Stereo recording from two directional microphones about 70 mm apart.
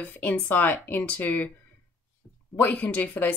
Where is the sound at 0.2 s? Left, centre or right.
Left.